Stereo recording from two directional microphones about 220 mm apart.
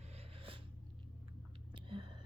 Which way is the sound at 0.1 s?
25° right (ahead or behind).